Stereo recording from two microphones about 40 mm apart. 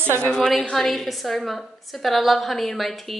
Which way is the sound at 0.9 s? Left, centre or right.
Centre.